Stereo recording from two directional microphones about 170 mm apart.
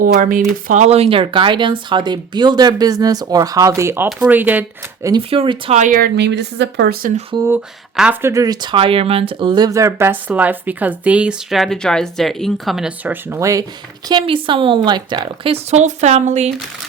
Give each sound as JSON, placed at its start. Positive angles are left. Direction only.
{"t": 0.0, "sound": "speech", "side_deg": -55}
{"t": 0.7, "sound": "speech", "side_deg": -40}
{"t": 5.3, "sound": "a woman's voice", "side_deg": -35}
{"t": 5.8, "sound": "speech", "side_deg": -55}
{"t": 6.1, "sound": "speech", "side_deg": -85}
{"t": 7.4, "sound": "speech", "side_deg": -10}
{"t": 8.3, "sound": "speech", "side_deg": -20}
{"t": 14.1, "sound": "a woman's voice", "side_deg": -30}